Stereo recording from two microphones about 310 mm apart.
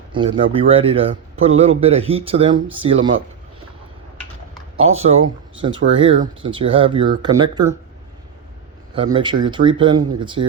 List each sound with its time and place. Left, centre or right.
0.1 s a man's voice: centre
4.8 s a man's voice: centre
9.0 s speech: centre